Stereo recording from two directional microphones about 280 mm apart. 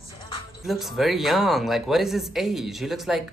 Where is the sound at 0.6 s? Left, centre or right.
Centre.